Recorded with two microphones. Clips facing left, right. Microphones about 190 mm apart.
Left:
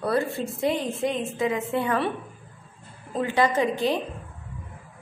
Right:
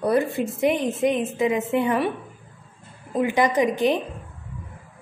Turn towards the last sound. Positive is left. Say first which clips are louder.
# right 3 dB
turn(degrees=-20)  # may be behind; listen again after turning